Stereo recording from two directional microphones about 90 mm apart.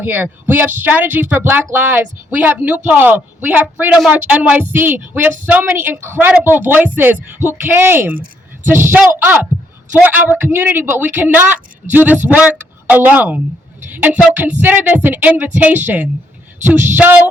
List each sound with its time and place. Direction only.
0.0 s speech: 25° right (ahead or behind)